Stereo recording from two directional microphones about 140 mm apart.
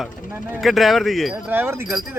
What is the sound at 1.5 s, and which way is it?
Speech, 15° right (ahead or behind).